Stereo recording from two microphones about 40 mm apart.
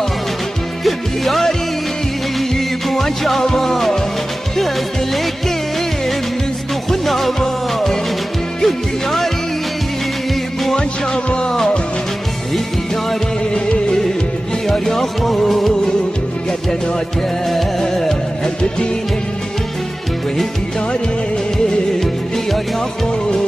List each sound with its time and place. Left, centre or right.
0.8 s music: centre
2.5 s music: centre
6.9 s music: centre
10.8 s music: left
13.7 s music: centre
14.7 s music: centre
17.5 s music: centre